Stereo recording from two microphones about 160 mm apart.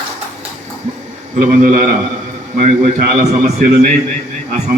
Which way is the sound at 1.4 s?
50° right (ahead or behind).